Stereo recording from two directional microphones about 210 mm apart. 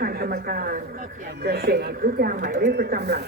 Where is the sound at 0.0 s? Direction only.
45° right (ahead or behind).